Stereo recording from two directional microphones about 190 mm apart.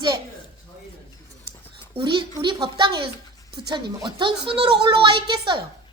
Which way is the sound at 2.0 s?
25° right (ahead or behind).